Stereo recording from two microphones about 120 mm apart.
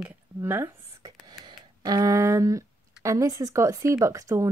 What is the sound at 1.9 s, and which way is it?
Speech, 30° right (ahead or behind).